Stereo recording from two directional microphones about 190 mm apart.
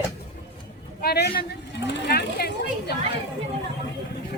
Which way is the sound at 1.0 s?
55° left (ahead or behind).